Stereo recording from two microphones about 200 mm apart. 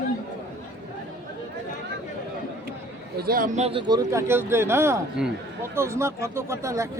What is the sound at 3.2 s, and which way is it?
A man's voice, 45° right (ahead or behind).